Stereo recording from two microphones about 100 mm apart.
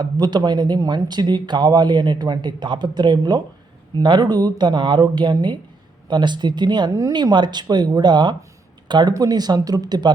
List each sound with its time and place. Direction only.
0.0 s speech: 45° right (ahead or behind)